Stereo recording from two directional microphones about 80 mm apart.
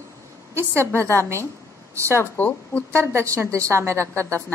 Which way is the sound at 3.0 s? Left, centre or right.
Right.